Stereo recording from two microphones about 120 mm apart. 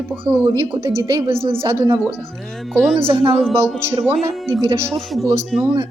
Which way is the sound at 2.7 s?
Centre (ahead or behind).